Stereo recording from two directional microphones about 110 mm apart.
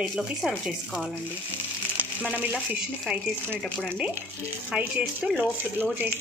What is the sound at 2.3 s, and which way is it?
Speech, 15° right (ahead or behind).